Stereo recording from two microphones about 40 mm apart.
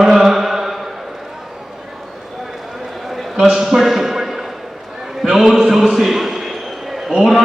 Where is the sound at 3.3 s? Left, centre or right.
Right.